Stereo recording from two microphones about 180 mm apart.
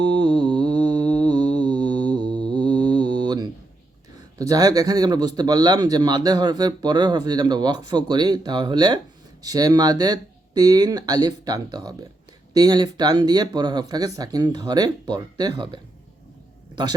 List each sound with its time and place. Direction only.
0.0 s mantra: 25° right (ahead or behind)
4.4 s speech: 20° right (ahead or behind)